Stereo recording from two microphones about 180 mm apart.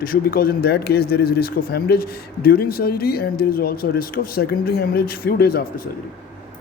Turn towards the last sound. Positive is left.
turn(degrees=60)  # may be behind; listen again after turning